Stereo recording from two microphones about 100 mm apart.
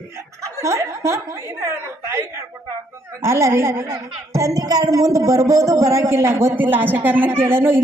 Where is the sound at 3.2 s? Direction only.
30° right (ahead or behind).